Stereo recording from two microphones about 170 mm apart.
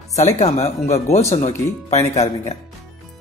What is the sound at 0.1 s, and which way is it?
Speech, 40° left (ahead or behind).